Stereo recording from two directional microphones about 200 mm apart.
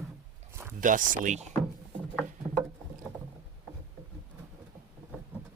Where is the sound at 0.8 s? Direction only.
40° right (ahead or behind).